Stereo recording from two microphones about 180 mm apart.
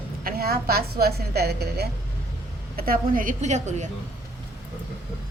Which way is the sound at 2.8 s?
50° right (ahead or behind).